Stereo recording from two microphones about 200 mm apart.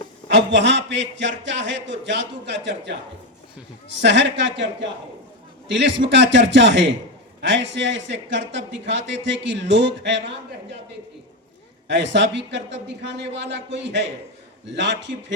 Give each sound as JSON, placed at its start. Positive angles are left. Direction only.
{"t": 0.3, "sound": "a man's voice", "side_deg": -65}
{"t": 3.8, "sound": "a man's voice", "side_deg": -65}
{"t": 6.1, "sound": "a man's voice", "side_deg": -65}
{"t": 11.9, "sound": "a man's voice", "side_deg": -65}